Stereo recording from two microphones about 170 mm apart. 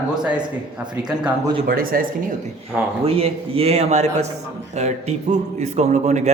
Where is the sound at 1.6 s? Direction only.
60° right (ahead or behind).